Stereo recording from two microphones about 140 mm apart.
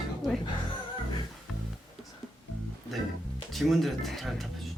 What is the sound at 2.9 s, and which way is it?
Speech, centre (ahead or behind).